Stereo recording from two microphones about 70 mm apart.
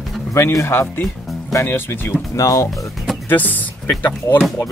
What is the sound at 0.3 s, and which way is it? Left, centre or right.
Speech, left.